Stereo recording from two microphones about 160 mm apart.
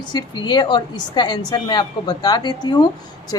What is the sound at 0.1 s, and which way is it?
A woman's voice, 30° left (ahead or behind).